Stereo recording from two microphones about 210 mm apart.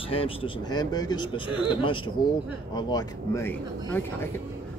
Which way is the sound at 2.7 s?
20° left (ahead or behind).